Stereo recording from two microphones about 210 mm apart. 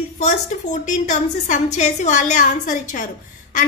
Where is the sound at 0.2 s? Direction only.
35° left (ahead or behind).